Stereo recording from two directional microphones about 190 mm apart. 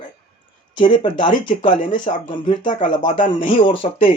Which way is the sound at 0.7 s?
25° left (ahead or behind).